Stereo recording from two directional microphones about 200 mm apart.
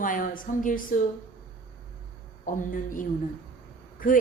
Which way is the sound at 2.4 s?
40° left (ahead or behind).